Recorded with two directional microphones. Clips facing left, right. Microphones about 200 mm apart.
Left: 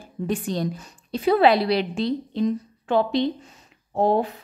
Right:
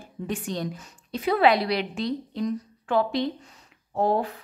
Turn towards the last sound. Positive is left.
turn(degrees=20)  # may be behind; listen again after turning